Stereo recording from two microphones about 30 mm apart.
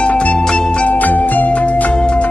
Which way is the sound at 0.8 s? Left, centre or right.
Left.